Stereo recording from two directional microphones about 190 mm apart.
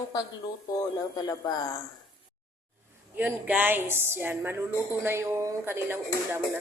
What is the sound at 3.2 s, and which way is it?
Speech, 10° right (ahead or behind).